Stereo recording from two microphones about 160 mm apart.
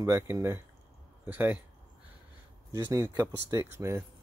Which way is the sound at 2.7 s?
20° right (ahead or behind).